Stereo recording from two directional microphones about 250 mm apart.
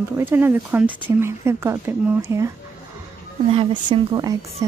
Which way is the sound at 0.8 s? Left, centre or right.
Centre.